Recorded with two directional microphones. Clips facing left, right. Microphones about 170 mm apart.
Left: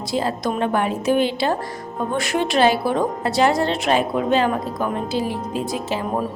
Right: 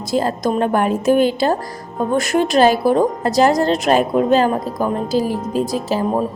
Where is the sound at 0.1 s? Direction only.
45° right (ahead or behind).